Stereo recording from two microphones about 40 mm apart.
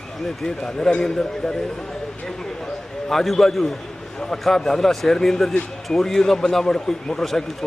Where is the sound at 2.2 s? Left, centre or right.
Centre.